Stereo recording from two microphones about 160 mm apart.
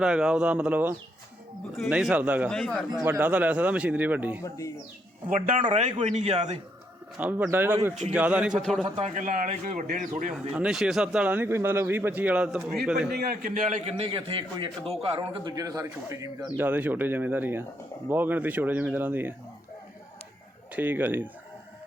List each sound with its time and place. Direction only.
0.0 s a man's voice: 5° right (ahead or behind)
4.4 s speech: 20° left (ahead or behind)
5.3 s a man's voice: 55° right (ahead or behind)
6.0 s speech: 45° right (ahead or behind)
7.2 s a man's voice: 10° right (ahead or behind)
9.0 s speech: 45° right (ahead or behind)
10.1 s speech: 50° right (ahead or behind)
10.5 s speech: 5° right (ahead or behind)
13.1 s a man's voice: 75° right (ahead or behind); by 13.9 s 50° right (ahead or behind)
13.9 s a man's voice: 35° right (ahead or behind); by 19.3 s 10° right (ahead or behind)
20.7 s speech: 10° right (ahead or behind)